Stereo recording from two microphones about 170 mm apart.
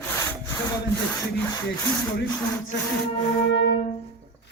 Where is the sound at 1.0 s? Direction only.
15° left (ahead or behind).